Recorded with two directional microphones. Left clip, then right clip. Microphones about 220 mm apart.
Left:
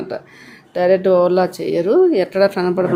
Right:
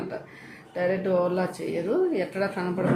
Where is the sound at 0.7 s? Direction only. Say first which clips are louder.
Left 12 dB; 45° left (ahead or behind).